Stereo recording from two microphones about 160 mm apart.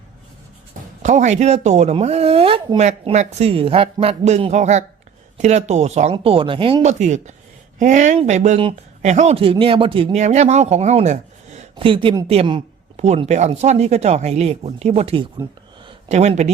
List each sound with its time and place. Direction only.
1.0 s speech: 50° right (ahead or behind); by 6.8 s 30° right (ahead or behind)
6.8 s speech: 45° right (ahead or behind)
11.8 s speech: 35° right (ahead or behind)